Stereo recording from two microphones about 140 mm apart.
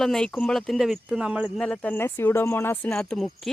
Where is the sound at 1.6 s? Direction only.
10° left (ahead or behind).